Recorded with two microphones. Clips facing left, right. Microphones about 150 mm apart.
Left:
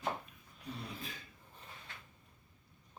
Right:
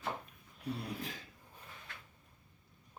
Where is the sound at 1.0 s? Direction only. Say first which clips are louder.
Right 4 dB; 90° right.